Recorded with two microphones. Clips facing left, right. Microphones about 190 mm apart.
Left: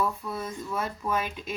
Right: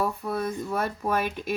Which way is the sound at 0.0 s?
65° right (ahead or behind).